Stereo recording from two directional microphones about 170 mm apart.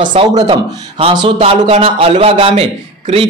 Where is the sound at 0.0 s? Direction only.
30° right (ahead or behind).